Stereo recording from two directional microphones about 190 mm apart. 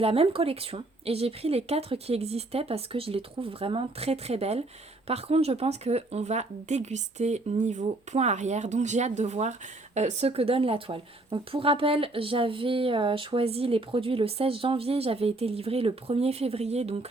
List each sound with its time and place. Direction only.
0.0 s speech: 30° right (ahead or behind)